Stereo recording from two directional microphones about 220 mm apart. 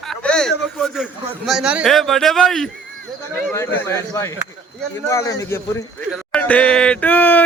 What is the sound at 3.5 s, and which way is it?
A man's voice, 10° left (ahead or behind).